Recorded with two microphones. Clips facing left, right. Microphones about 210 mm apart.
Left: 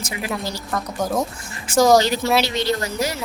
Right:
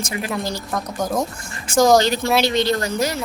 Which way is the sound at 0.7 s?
Centre (ahead or behind).